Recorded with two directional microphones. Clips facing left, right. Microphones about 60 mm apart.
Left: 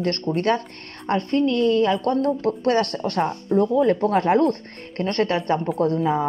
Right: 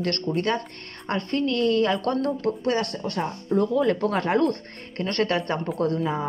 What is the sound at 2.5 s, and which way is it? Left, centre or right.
Speech, left.